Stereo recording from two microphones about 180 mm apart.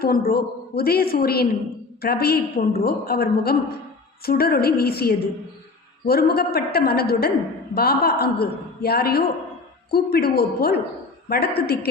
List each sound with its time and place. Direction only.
0.0 s a woman's voice: 55° left (ahead or behind)